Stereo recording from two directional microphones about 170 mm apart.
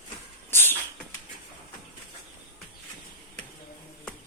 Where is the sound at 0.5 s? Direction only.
15° left (ahead or behind).